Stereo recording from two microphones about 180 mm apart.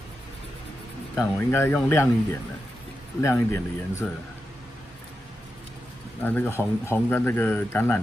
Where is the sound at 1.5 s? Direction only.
15° left (ahead or behind).